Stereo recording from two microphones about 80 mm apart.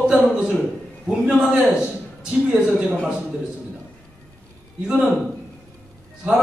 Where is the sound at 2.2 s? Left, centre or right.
Centre.